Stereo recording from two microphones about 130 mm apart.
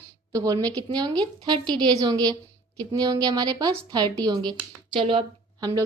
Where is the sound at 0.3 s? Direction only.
30° right (ahead or behind).